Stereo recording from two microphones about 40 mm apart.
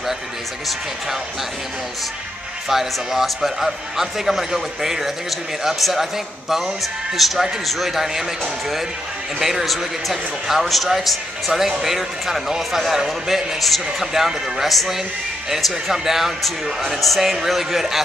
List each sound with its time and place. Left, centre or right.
2.7 s speech: centre
9.4 s speech: centre
13.6 s speech: centre